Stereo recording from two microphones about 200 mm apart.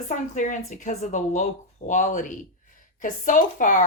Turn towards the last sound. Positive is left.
turn(degrees=40)  # may be behind; listen again after turning